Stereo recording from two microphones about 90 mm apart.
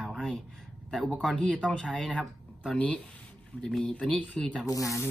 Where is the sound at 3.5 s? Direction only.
15° right (ahead or behind).